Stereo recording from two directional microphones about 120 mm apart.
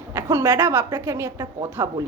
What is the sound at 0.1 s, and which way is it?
A woman's voice, 25° right (ahead or behind).